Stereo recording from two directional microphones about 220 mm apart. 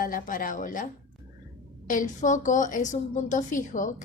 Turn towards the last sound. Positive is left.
turn(degrees=35)  # may be behind; listen again after turning